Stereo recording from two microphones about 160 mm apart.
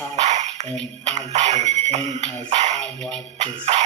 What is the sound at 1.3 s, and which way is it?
Music, 45° right (ahead or behind).